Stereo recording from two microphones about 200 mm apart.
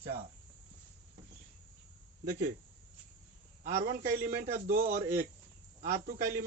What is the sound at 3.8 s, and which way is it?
Speech, 50° right (ahead or behind).